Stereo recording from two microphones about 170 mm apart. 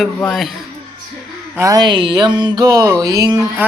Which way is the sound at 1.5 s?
20° right (ahead or behind).